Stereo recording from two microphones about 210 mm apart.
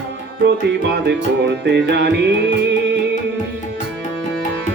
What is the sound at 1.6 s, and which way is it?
Music, 55° right (ahead or behind).